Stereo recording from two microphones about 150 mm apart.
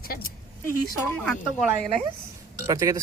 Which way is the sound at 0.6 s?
10° left (ahead or behind).